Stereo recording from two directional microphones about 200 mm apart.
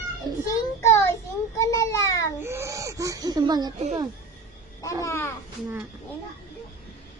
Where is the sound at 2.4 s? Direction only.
10° right (ahead or behind).